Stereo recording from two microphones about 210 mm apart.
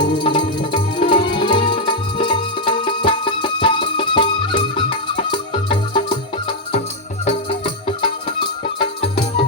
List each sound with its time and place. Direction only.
0.0 s music: 25° left (ahead or behind)
7.3 s music: 25° left (ahead or behind)